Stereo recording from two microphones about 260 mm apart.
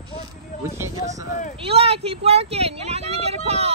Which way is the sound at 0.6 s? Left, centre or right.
Centre.